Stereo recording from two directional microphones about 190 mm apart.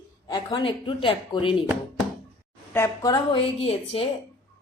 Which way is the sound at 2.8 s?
15° left (ahead or behind).